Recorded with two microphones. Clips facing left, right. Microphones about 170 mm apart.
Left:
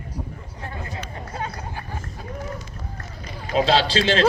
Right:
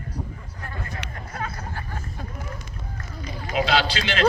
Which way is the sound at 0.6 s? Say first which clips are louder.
Left 2 dB; 20° left (ahead or behind).